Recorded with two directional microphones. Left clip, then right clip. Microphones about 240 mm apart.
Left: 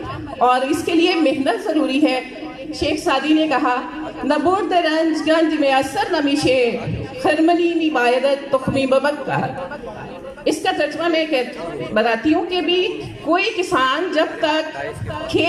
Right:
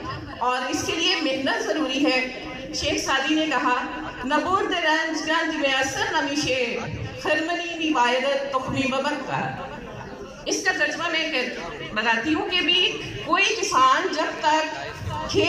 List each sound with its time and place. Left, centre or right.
0.3 s a woman's voice: left
10.4 s a woman's voice: left